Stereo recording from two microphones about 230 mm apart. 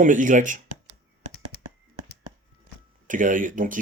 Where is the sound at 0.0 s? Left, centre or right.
Right.